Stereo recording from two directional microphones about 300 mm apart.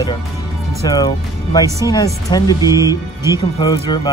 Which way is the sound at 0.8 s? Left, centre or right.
Centre.